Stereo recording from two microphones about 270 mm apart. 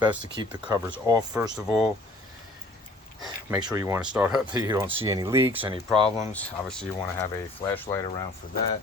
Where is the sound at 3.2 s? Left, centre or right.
Centre.